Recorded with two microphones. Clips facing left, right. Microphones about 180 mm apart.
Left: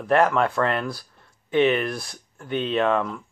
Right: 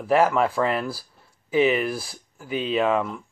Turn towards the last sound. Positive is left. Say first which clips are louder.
# even
turn(degrees=-5)  # may be behind; listen again after turning